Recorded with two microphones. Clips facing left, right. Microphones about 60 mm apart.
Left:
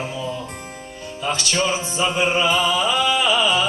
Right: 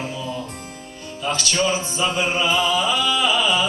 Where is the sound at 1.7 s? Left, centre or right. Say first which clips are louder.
Even; left.